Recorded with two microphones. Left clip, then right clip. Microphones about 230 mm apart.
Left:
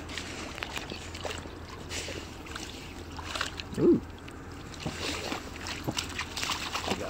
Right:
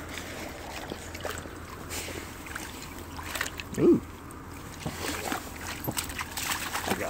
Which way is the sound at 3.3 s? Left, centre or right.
Right.